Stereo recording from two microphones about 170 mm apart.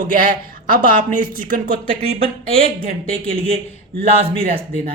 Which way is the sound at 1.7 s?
35° right (ahead or behind).